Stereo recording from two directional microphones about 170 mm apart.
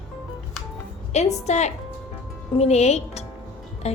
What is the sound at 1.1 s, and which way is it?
A woman's voice, 40° left (ahead or behind).